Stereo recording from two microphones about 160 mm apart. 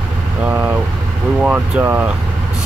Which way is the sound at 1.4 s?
10° right (ahead or behind).